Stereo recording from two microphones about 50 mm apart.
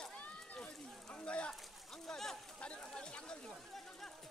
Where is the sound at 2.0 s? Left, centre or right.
Centre.